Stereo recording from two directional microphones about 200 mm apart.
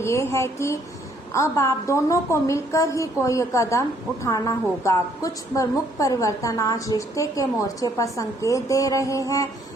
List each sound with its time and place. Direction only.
0.0 s a woman's voice: 15° left (ahead or behind)